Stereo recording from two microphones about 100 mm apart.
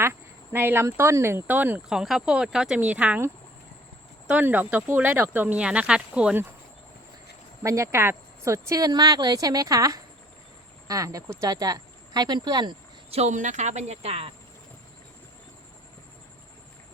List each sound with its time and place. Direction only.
0.0 s speech: 20° right (ahead or behind)
1.9 s speech: 5° right (ahead or behind)
4.3 s speech: 15° right (ahead or behind)
7.6 s speech: 30° right (ahead or behind)
13.8 s speech: 90° right